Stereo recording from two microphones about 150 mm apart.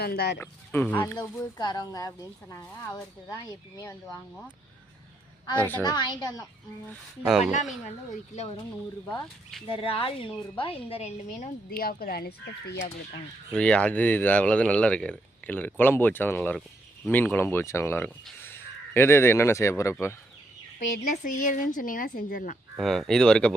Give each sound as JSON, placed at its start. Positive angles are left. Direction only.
{"t": 0.0, "sound": "speech", "side_deg": 90}
{"t": 0.3, "sound": "speech", "side_deg": 10}
{"t": 1.5, "sound": "a woman's voice", "side_deg": 30}
{"t": 5.5, "sound": "speech", "side_deg": 15}
{"t": 5.8, "sound": "a woman's voice", "side_deg": 30}
{"t": 7.2, "sound": "speech", "side_deg": -5}
{"t": 9.6, "sound": "speech", "side_deg": 35}
{"t": 11.8, "sound": "speech", "side_deg": 75}
{"t": 13.5, "sound": "speech", "side_deg": 5}
{"t": 20.7, "sound": "speech", "side_deg": 60}
{"t": 22.8, "sound": "speech", "side_deg": 5}